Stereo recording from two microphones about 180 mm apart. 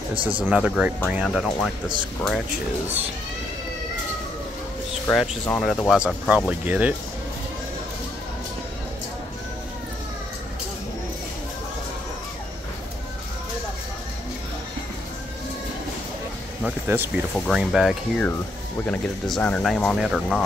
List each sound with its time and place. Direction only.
0.1 s speech: 30° right (ahead or behind)
0.5 s speech: 5° right (ahead or behind)
5.0 s speech: centre (ahead or behind)
16.6 s speech: 10° right (ahead or behind)